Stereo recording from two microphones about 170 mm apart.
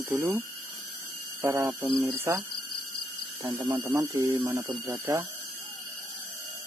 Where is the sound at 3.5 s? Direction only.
25° right (ahead or behind).